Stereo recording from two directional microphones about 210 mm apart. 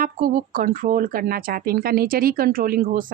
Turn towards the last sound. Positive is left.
turn(degrees=-40)  # may be behind; listen again after turning